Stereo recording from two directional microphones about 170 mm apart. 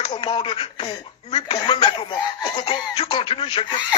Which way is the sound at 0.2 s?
30° left (ahead or behind).